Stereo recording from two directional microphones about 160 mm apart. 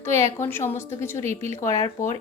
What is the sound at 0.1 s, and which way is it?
A woman's voice, 15° left (ahead or behind).